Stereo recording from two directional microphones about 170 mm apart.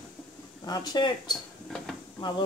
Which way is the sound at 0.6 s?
25° left (ahead or behind).